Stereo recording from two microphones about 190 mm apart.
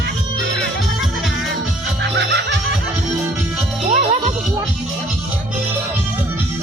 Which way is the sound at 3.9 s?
40° right (ahead or behind).